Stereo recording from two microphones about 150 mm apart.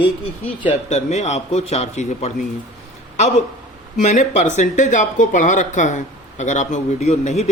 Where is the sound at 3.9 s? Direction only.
55° left (ahead or behind).